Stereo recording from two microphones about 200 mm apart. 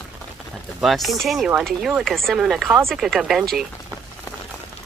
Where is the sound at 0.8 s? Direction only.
Centre (ahead or behind).